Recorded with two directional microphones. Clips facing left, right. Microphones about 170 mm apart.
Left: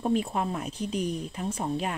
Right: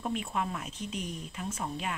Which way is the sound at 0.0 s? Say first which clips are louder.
Left 6 dB; 35° left (ahead or behind).